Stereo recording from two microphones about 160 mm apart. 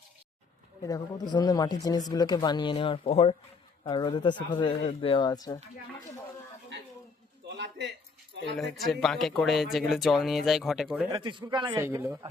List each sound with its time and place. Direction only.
0.8 s a woman's voice: 20° left (ahead or behind); by 3.3 s 40° left (ahead or behind)
3.8 s speech: 25° left (ahead or behind)
7.4 s a sound: 90° right
8.5 s speech: centre (ahead or behind)
11.1 s speech: 30° right (ahead or behind)
11.8 s speech: 15° right (ahead or behind)